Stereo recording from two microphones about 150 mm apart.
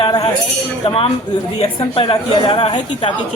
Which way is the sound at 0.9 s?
40° left (ahead or behind).